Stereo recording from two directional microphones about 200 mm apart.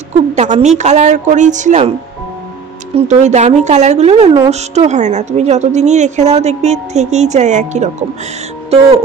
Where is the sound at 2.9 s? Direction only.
35° right (ahead or behind).